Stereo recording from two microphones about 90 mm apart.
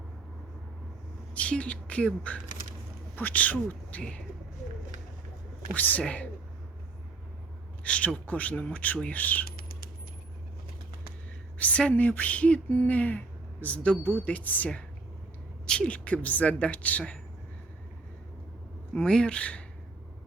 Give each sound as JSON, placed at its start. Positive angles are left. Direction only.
{"t": 1.3, "sound": "speech", "side_deg": 15}
{"t": 5.7, "sound": "speech", "side_deg": 20}
{"t": 7.9, "sound": "speech", "side_deg": 10}
{"t": 11.5, "sound": "speech", "side_deg": 15}
{"t": 18.9, "sound": "speech", "side_deg": 10}